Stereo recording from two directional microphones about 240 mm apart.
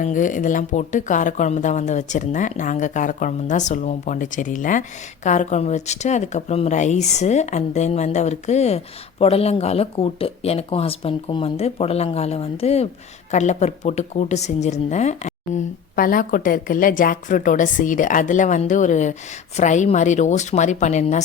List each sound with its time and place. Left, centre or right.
0.0 s a woman's voice: left